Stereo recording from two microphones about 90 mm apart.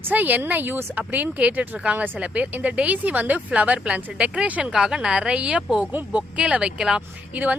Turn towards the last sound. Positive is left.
turn(degrees=-15)  # may be behind; listen again after turning